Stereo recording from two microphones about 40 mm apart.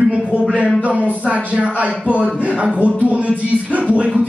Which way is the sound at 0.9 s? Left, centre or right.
Right.